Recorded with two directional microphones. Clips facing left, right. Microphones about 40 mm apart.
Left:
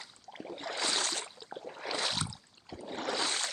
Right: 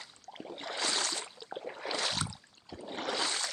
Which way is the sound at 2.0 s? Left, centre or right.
Centre.